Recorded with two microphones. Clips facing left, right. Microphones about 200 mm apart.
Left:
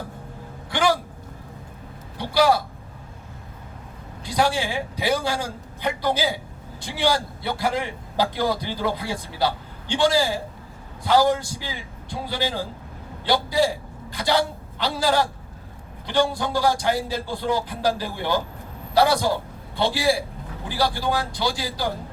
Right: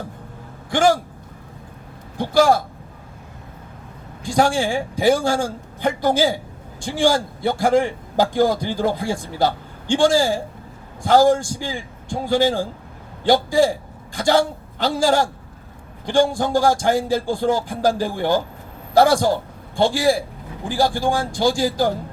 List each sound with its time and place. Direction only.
0.7 s speech: 45° right (ahead or behind)
2.1 s a man's voice: 45° right (ahead or behind)
4.2 s a man's voice: 45° right (ahead or behind)